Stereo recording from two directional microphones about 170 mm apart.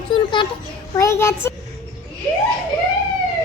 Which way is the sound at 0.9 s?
15° left (ahead or behind).